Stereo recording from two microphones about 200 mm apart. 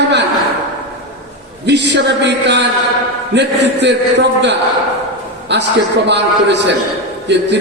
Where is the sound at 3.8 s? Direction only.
60° right (ahead or behind).